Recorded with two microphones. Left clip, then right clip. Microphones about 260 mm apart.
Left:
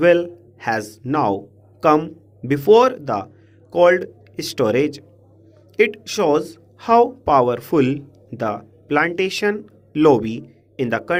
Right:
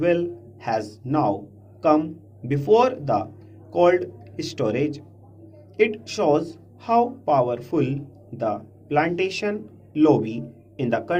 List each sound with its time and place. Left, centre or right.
0.0 s speech: left